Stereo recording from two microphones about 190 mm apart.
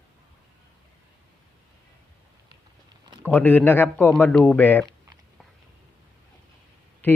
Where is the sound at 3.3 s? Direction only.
10° left (ahead or behind).